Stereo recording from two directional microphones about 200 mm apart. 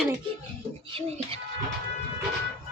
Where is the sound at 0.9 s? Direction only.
30° right (ahead or behind).